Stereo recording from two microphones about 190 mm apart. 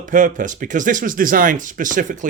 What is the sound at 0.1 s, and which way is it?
Speech, 45° right (ahead or behind).